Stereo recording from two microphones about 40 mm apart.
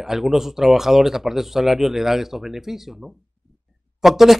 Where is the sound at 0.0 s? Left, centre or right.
Centre.